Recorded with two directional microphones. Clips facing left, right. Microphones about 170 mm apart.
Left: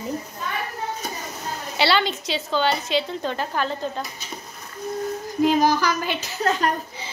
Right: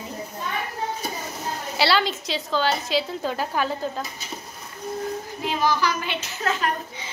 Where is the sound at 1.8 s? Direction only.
Centre (ahead or behind).